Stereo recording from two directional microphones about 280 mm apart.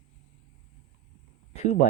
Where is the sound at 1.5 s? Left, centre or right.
Left.